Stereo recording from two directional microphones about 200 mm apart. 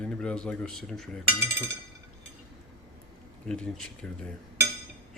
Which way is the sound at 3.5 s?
5° left (ahead or behind).